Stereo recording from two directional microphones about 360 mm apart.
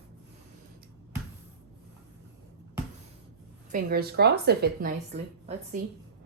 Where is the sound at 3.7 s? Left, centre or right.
Right.